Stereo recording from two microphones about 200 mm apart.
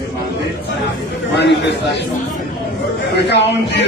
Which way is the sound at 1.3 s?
60° left (ahead or behind).